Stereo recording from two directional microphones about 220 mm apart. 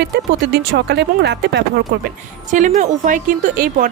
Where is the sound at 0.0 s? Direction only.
45° right (ahead or behind).